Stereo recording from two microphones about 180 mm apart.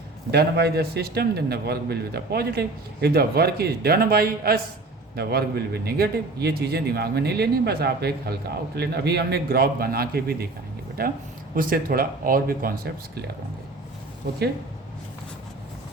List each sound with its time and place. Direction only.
0.3 s a man's voice: 65° right (ahead or behind)